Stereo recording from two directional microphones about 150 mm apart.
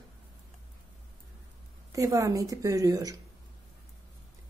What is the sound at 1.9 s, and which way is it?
A woman's voice, 20° right (ahead or behind).